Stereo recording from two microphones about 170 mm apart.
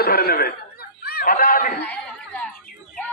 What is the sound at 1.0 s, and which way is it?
Snicker, 65° left (ahead or behind).